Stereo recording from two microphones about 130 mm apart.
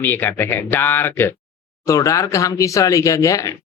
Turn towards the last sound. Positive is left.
turn(degrees=25)  # may be behind; listen again after turning